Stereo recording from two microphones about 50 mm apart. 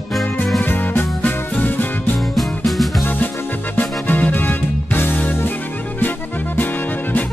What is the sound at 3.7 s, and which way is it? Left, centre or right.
Music, left.